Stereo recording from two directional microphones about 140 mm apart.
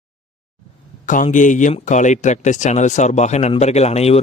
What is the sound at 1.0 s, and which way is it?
A man's voice, 70° left (ahead or behind).